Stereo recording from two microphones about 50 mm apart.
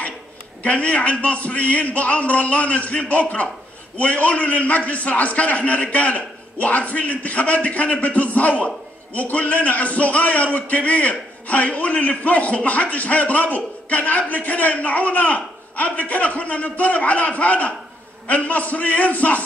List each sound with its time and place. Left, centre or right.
0.6 s a man's voice: left